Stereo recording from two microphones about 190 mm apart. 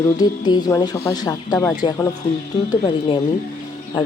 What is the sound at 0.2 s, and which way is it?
A woman's voice, 20° left (ahead or behind).